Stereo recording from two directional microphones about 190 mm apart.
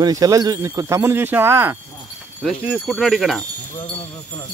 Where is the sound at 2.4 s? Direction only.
5° left (ahead or behind).